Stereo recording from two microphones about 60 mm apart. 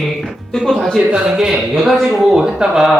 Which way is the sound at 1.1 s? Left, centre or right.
Centre.